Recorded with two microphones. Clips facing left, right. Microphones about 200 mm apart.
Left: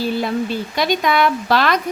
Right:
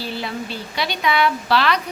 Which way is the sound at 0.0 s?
45° left (ahead or behind).